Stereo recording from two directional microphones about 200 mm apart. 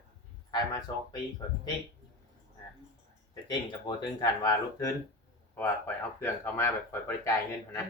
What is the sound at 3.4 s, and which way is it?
Speech, 20° left (ahead or behind).